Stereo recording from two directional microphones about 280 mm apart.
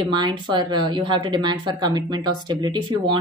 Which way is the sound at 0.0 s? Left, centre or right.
Centre.